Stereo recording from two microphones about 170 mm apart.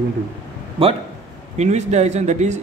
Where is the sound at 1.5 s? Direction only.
40° right (ahead or behind).